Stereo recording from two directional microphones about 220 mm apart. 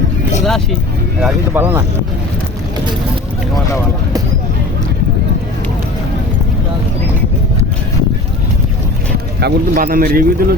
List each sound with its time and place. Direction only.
0.4 s speech: centre (ahead or behind)
1.2 s speech: 10° right (ahead or behind)
9.4 s speech: 40° right (ahead or behind)